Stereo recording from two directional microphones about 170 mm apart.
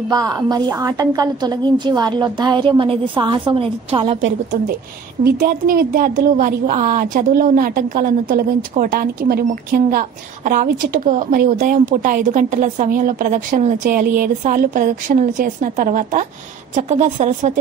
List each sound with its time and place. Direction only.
0.1 s a woman's voice: 20° right (ahead or behind)
5.2 s a woman's voice: 60° right (ahead or behind)